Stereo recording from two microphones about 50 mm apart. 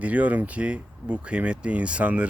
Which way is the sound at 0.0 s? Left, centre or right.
Right.